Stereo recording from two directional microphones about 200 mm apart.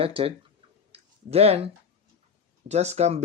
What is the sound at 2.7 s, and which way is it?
Speech, 35° right (ahead or behind).